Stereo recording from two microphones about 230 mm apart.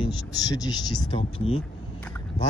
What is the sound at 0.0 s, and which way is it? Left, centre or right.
Speech, centre.